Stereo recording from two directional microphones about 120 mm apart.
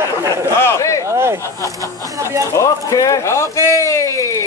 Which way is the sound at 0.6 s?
25° left (ahead or behind).